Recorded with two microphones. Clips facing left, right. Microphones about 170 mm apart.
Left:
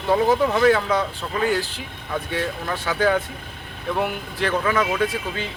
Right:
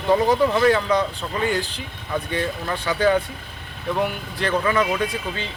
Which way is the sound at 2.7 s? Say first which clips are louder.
Right 1 dB; 5° left (ahead or behind).